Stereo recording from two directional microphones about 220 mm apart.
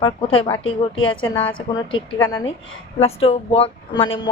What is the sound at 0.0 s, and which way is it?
A woman's voice, 25° left (ahead or behind).